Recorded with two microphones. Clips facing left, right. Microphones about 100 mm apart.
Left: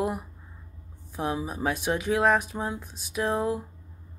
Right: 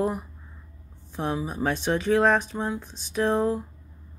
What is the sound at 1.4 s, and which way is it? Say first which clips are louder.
Speech: right 2 dB; 5° left (ahead or behind).